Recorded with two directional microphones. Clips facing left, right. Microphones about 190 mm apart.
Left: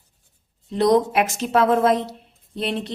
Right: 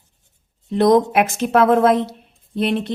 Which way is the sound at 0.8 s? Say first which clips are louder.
Right 3 dB; 55° right (ahead or behind).